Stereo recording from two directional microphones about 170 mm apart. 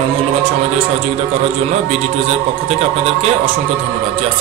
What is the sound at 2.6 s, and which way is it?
Speech, 35° right (ahead or behind).